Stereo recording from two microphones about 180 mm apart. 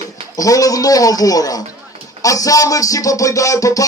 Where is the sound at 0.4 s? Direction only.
20° left (ahead or behind).